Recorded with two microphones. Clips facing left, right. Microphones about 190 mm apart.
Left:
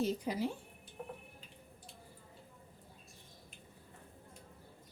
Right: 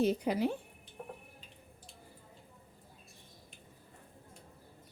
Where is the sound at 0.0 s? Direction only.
65° right (ahead or behind).